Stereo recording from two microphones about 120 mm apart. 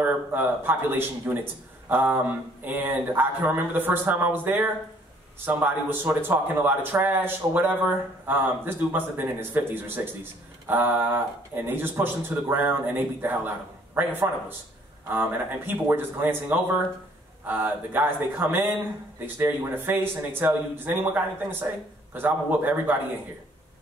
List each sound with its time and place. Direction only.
0.0 s speech: 15° right (ahead or behind)